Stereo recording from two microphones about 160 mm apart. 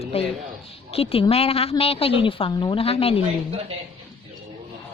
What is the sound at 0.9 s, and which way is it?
A woman's voice, 40° left (ahead or behind).